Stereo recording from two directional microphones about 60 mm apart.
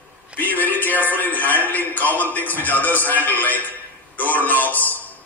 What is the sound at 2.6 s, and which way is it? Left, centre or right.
A man's voice, left.